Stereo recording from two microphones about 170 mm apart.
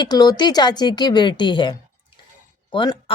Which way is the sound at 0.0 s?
25° left (ahead or behind).